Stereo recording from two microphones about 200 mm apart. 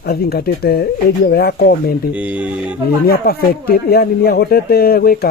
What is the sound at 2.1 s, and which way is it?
Speech, 5° right (ahead or behind).